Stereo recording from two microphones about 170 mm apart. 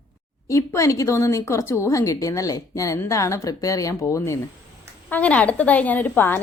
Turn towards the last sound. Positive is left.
turn(degrees=10)  # may be behind; listen again after turning